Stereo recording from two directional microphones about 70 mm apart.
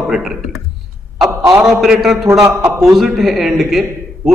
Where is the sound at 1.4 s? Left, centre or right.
Right.